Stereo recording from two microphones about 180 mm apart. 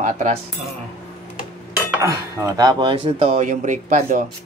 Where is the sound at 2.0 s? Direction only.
15° right (ahead or behind); by 4.2 s 45° right (ahead or behind).